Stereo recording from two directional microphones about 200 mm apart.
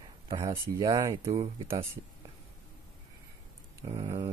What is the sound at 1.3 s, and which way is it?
Speech, 25° right (ahead or behind).